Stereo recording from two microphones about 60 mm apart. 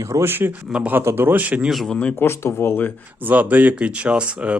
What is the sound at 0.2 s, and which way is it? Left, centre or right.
Speech, right.